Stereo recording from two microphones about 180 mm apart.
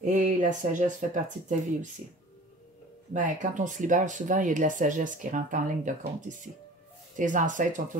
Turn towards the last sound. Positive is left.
turn(degrees=-45)  # may be behind; listen again after turning